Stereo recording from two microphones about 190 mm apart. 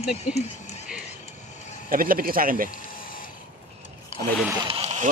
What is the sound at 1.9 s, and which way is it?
Speech, 50° right (ahead or behind).